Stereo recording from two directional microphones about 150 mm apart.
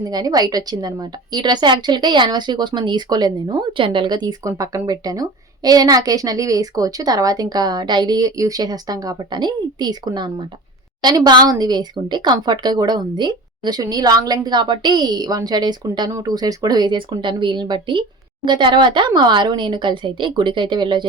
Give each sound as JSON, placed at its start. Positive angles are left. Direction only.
{"t": 0.0, "sound": "a woman's voice", "side_deg": -25}